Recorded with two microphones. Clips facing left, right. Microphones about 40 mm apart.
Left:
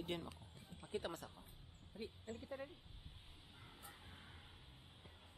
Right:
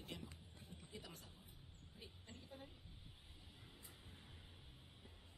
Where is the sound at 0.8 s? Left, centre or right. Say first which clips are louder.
Left 13 dB; left.